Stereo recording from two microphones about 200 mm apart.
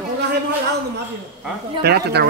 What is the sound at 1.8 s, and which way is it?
Speech, 55° right (ahead or behind).